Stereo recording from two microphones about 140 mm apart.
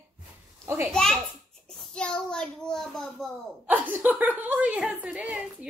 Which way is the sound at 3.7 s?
15° right (ahead or behind).